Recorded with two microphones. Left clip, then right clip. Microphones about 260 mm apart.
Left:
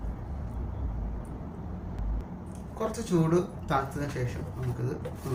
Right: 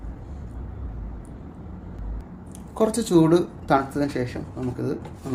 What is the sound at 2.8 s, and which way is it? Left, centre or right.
Speech, right.